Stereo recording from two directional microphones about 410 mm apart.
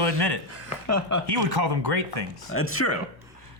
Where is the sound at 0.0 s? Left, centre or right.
Right.